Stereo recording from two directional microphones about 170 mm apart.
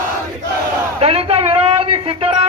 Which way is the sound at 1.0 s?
35° right (ahead or behind).